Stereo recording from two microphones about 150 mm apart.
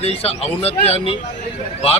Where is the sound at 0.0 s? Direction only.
40° left (ahead or behind).